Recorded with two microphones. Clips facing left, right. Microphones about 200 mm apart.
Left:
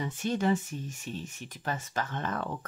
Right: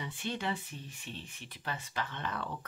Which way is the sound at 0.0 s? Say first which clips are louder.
Left 8 dB; 45° left (ahead or behind).